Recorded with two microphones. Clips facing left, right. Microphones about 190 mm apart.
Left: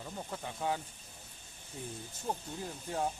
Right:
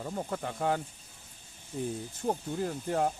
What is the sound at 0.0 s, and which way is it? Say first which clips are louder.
Speech: right 7 dB; 55° right (ahead or behind).